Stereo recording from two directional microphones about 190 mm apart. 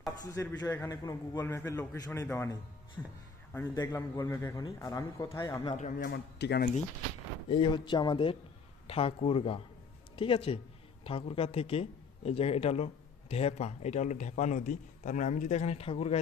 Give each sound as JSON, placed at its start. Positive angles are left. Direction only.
{"t": 0.2, "sound": "a man's voice", "side_deg": 15}
{"t": 5.7, "sound": "speech", "side_deg": 40}
{"t": 6.1, "sound": "a man's voice", "side_deg": 60}
{"t": 7.5, "sound": "speech", "side_deg": 25}